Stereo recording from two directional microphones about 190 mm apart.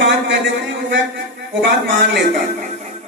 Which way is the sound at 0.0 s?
75° right (ahead or behind).